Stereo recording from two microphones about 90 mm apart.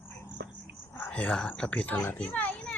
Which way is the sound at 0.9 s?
20° left (ahead or behind).